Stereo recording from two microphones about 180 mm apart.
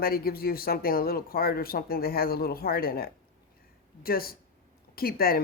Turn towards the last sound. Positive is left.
turn(degrees=55)  # may be behind; listen again after turning